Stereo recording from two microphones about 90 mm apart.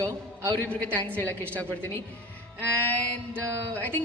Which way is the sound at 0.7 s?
20° left (ahead or behind).